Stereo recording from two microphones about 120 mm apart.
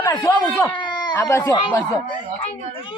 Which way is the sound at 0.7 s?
40° left (ahead or behind).